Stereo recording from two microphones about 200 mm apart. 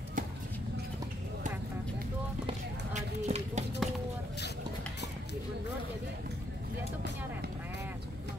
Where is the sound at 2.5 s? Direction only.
35° right (ahead or behind).